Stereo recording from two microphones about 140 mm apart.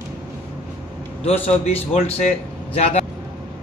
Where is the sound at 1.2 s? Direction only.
45° left (ahead or behind).